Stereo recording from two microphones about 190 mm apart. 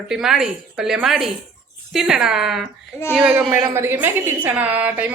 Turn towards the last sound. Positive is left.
turn(degrees=-10)  # may be behind; listen again after turning